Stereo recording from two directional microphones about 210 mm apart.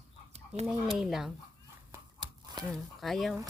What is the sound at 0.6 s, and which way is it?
Speech, centre (ahead or behind).